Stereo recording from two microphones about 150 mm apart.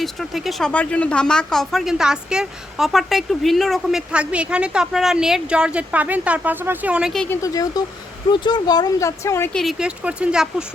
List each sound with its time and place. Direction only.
0.0 s speech: centre (ahead or behind)
7.3 s speech: 25° left (ahead or behind)
9.5 s speech: centre (ahead or behind)